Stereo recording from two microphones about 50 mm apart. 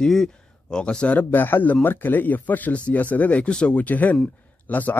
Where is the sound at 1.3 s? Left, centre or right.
Left.